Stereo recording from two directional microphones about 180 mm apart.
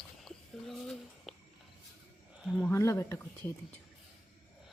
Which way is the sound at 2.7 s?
15° left (ahead or behind).